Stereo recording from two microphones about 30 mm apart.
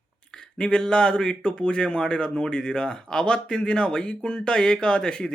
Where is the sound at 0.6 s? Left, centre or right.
Left.